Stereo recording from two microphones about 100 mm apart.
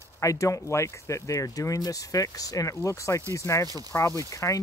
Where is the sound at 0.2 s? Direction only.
35° left (ahead or behind).